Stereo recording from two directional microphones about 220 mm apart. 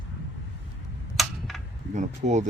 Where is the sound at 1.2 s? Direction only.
Centre (ahead or behind).